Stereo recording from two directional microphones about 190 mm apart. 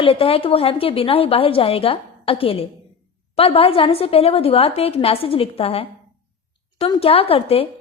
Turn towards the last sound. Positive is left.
turn(degrees=30)  # may be behind; listen again after turning